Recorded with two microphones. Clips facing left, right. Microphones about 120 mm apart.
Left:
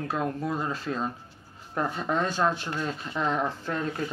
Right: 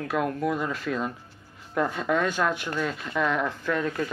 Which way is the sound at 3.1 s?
65° right (ahead or behind).